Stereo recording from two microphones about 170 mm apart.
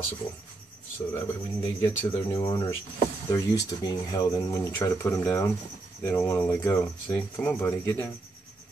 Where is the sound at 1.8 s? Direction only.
15° left (ahead or behind).